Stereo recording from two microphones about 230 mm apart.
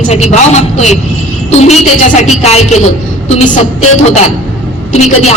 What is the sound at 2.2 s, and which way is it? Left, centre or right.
Speech, left.